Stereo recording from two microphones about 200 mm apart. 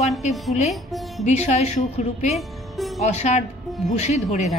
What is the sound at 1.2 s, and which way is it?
A woman's voice, 35° left (ahead or behind).